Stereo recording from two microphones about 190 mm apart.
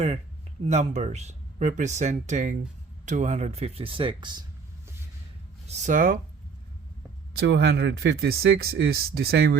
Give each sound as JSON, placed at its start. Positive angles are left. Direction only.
{"t": 0.6, "sound": "speech", "side_deg": -35}
{"t": 5.6, "sound": "speech", "side_deg": -35}
{"t": 7.3, "sound": "speech", "side_deg": -65}